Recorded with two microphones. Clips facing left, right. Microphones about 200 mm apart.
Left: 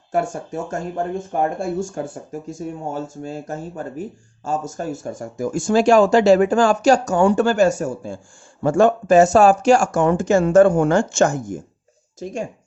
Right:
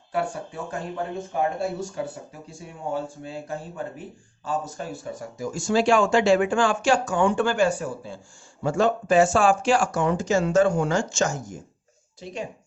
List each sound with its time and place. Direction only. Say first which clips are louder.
0.1 s speech: left 5 dB; 45° left (ahead or behind)